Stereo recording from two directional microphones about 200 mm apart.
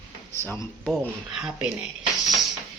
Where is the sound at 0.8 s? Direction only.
Centre (ahead or behind).